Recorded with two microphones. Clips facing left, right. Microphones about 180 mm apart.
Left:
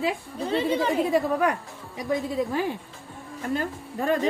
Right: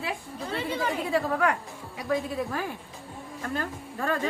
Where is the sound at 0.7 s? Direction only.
20° left (ahead or behind).